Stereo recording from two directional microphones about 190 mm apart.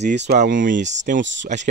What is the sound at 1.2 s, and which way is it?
Speech, 70° right (ahead or behind).